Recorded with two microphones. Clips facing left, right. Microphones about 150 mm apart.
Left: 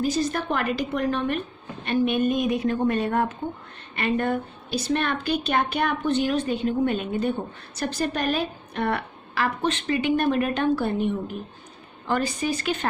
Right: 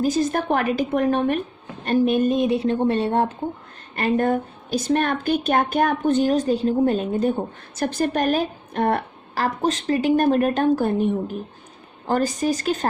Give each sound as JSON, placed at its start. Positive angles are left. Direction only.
{"t": 0.0, "sound": "a woman's voice", "side_deg": -45}
{"t": 1.8, "sound": "a woman's voice", "side_deg": -40}
{"t": 3.9, "sound": "a woman's voice", "side_deg": -40}
{"t": 7.8, "sound": "a woman's voice", "side_deg": -50}